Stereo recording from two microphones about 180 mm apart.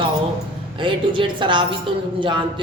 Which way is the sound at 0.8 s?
30° right (ahead or behind).